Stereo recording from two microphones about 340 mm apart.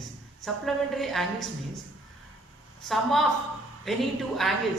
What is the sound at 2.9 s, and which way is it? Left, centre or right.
A woman's voice, centre.